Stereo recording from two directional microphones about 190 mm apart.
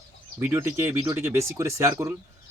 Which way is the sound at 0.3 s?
15° right (ahead or behind).